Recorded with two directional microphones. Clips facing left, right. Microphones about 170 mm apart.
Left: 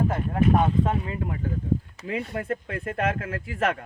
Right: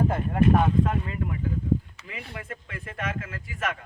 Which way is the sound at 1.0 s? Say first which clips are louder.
Left 1 dB; 40° left (ahead or behind).